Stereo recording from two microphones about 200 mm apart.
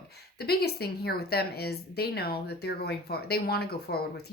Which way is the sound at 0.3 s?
50° left (ahead or behind).